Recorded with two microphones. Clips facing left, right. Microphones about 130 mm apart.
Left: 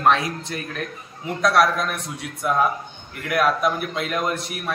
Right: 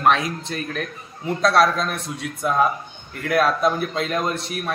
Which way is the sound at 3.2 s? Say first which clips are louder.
Right 2 dB; 30° right (ahead or behind).